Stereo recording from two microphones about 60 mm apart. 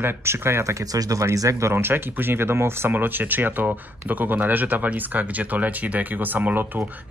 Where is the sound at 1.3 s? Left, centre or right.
Right.